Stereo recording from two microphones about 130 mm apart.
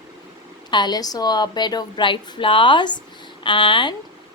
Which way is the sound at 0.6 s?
35° left (ahead or behind).